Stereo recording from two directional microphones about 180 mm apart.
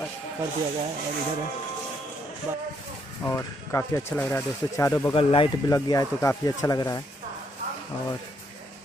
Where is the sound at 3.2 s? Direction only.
15° left (ahead or behind).